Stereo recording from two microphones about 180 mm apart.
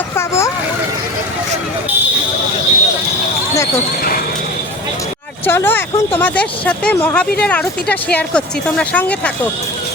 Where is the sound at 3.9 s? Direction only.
55° left (ahead or behind).